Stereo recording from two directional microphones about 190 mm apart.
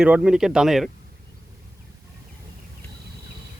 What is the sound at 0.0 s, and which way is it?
Speech, 5° right (ahead or behind).